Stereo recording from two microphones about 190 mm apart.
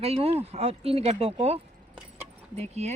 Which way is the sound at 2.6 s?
35° right (ahead or behind).